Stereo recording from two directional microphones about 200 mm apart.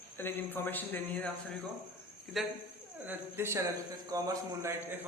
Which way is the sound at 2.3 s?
Centre (ahead or behind).